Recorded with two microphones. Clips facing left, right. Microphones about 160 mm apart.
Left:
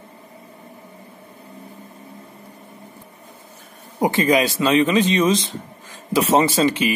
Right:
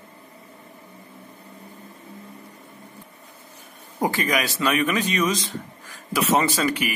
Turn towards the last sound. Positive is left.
turn(degrees=25)  # may be behind; listen again after turning